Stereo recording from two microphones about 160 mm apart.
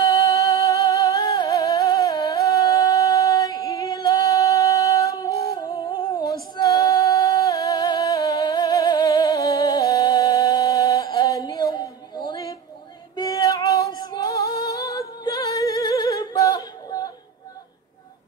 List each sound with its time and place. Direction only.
0.0 s music: 20° left (ahead or behind)
5.5 s humming: 25° left (ahead or behind)
6.5 s music: 25° left (ahead or behind)
13.1 s female singing: 25° left (ahead or behind)